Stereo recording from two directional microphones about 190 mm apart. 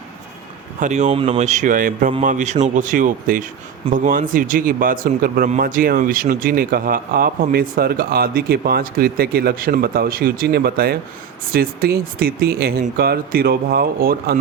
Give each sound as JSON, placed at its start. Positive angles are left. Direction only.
{"t": 0.8, "sound": "speech", "side_deg": -40}